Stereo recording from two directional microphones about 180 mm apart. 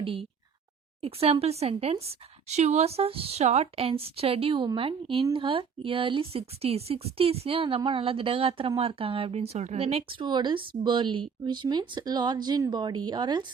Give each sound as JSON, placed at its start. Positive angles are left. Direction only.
{"t": 0.0, "sound": "a woman's voice", "side_deg": -30}